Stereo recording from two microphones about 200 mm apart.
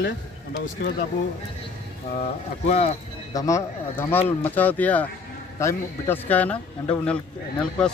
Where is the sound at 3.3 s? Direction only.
15° left (ahead or behind).